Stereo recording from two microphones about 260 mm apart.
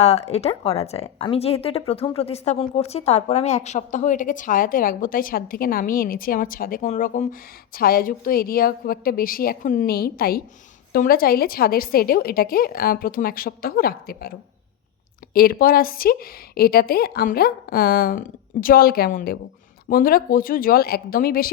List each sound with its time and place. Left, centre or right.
0.0 s a woman's voice: left